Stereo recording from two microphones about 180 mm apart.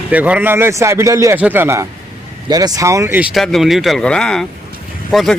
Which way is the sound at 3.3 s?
Centre (ahead or behind).